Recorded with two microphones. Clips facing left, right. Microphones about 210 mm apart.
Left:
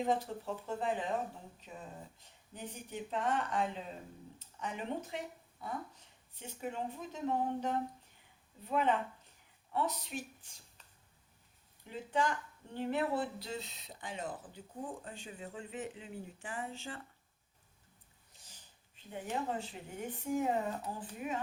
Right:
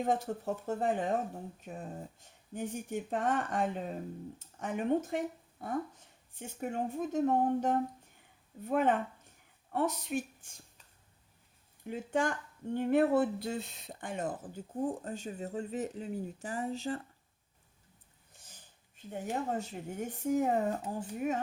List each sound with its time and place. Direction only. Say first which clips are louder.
0.0 s speech: right 2 dB; 50° right (ahead or behind)
11.9 s speech: right 3 dB; 50° right (ahead or behind)
19.1 s speech: right 3 dB; 45° right (ahead or behind)